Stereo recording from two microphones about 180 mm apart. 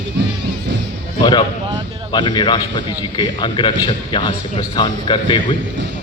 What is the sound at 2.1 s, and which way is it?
Speech, 25° left (ahead or behind).